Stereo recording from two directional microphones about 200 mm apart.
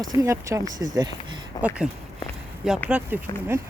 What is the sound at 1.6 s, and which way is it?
Speech, 5° right (ahead or behind).